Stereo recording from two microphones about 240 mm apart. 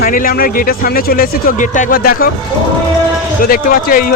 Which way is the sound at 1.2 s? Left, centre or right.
Left.